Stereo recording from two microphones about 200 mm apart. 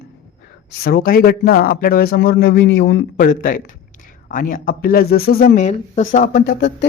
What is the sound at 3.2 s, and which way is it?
Speech, 45° left (ahead or behind).